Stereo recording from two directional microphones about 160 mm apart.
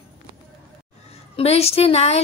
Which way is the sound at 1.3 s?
40° left (ahead or behind).